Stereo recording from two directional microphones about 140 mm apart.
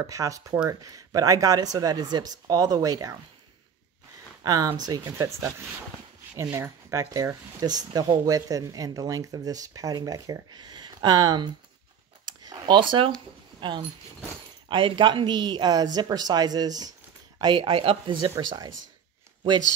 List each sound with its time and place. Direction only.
0.0 s speech: 25° right (ahead or behind)
4.4 s speech: 25° right (ahead or behind)
12.3 s a sound: 30° right (ahead or behind)
13.6 s speech: 35° right (ahead or behind)